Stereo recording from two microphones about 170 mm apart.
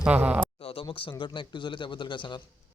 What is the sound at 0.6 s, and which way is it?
A man's voice, 35° left (ahead or behind).